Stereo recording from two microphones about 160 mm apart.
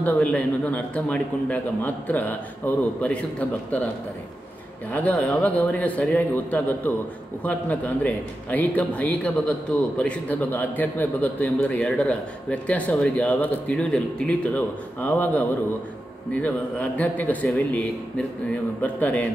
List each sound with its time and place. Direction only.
0.0 s a man's voice: 10° left (ahead or behind)
4.9 s a man's voice: 10° left (ahead or behind)